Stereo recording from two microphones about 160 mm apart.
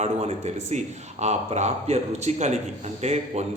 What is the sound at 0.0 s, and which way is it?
A man's voice, 40° right (ahead or behind).